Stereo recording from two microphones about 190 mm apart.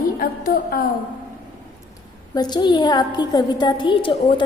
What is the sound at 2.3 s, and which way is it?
A woman's voice, 20° left (ahead or behind).